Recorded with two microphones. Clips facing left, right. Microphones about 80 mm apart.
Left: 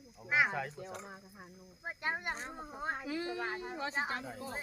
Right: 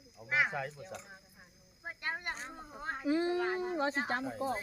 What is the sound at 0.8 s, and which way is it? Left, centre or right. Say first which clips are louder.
Speech: left 2 dB; left.